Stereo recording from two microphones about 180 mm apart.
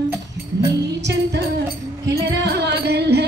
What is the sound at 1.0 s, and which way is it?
Music, 75° right (ahead or behind).